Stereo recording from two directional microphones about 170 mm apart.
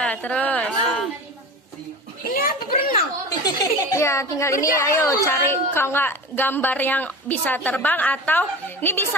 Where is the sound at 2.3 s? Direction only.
55° left (ahead or behind).